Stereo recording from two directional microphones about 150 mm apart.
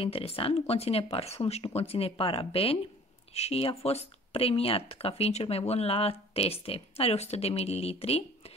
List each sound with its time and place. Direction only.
0.0 s speech: 40° left (ahead or behind)